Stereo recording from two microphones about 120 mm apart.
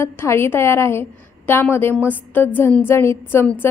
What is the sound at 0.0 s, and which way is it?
A woman's voice, 20° left (ahead or behind).